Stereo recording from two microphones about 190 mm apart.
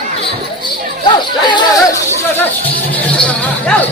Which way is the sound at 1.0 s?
25° left (ahead or behind).